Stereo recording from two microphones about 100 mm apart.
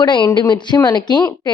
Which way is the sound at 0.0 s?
50° left (ahead or behind).